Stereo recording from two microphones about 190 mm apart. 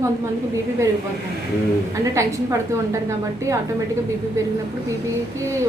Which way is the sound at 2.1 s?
15° right (ahead or behind).